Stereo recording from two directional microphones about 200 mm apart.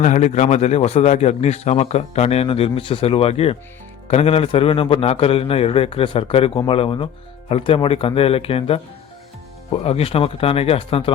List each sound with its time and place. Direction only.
0.0 s a man's voice: 35° left (ahead or behind)